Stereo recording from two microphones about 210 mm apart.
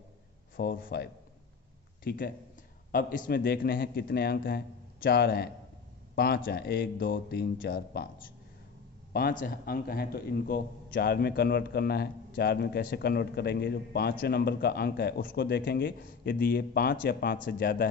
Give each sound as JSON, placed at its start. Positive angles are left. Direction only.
{"t": 0.6, "sound": "a man's voice", "side_deg": 45}
{"t": 9.1, "sound": "a man's voice", "side_deg": 45}